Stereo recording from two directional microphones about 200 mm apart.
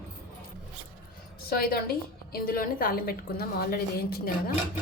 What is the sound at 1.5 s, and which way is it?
A woman's voice, 50° left (ahead or behind).